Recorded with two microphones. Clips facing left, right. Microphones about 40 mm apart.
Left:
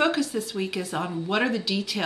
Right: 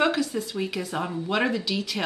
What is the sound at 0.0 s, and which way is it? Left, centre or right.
A woman's voice, centre.